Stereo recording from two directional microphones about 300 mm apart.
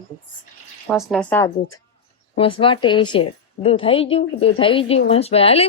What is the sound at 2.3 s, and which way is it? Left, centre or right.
A woman's voice, centre.